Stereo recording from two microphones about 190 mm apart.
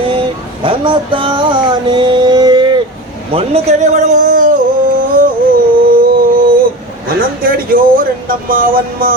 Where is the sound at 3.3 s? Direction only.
30° right (ahead or behind).